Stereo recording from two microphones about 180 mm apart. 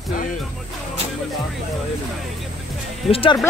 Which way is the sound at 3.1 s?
30° left (ahead or behind).